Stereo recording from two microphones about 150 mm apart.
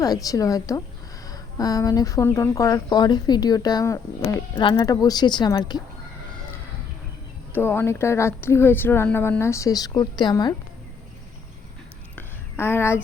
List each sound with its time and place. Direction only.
0.0 s speech: 25° left (ahead or behind)
7.5 s speech: 15° left (ahead or behind)
12.1 s a sound: 15° left (ahead or behind)